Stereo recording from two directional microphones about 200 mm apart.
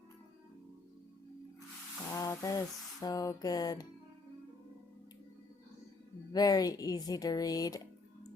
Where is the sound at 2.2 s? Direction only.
15° left (ahead or behind).